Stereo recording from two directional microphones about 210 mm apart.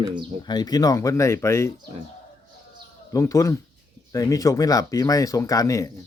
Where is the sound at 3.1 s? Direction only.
15° left (ahead or behind).